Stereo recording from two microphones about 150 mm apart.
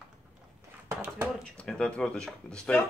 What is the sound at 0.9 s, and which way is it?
Speech, 15° right (ahead or behind).